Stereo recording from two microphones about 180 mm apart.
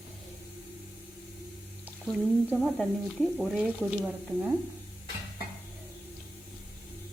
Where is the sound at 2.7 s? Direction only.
Centre (ahead or behind).